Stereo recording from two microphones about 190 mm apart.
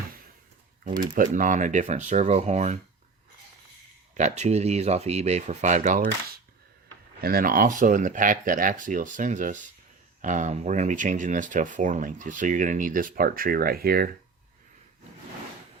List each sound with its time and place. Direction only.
1.1 s speech: 45° right (ahead or behind)
4.1 s speech: 40° right (ahead or behind)
7.2 s speech: 50° right (ahead or behind)